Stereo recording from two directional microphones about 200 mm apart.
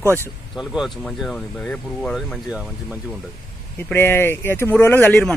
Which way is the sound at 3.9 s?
10° left (ahead or behind).